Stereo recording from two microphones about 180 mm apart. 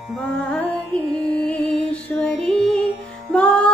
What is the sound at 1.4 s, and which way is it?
Music, 5° left (ahead or behind).